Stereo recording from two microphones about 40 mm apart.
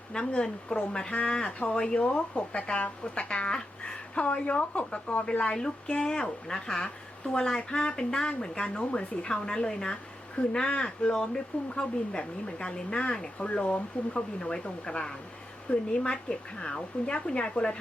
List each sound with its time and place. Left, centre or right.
0.1 s speech: left
4.3 s speech: left
5.5 s speech: centre